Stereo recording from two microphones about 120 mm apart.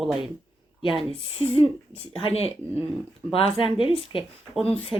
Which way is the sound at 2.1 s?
55° left (ahead or behind).